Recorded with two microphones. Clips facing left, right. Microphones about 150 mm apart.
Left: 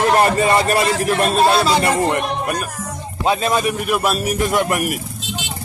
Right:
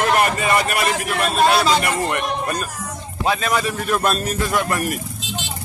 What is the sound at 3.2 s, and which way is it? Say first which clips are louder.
A man's voice: left 3 dB; 25° left (ahead or behind).